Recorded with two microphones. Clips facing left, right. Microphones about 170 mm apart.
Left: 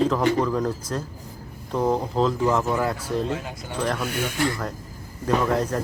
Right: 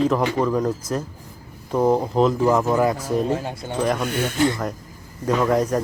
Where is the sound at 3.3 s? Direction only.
30° right (ahead or behind).